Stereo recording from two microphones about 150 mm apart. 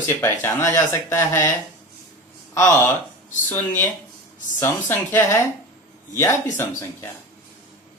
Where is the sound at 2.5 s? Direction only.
20° left (ahead or behind).